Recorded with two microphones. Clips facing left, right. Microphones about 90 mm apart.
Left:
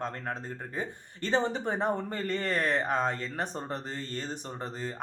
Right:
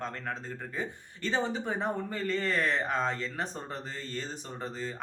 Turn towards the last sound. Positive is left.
turn(degrees=50)  # may be behind; listen again after turning